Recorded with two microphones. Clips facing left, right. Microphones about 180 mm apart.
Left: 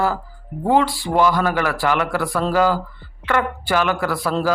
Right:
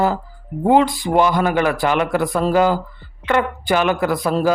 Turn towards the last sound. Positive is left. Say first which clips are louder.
# right 3 dB
turn(degrees=-15)  # may be behind; listen again after turning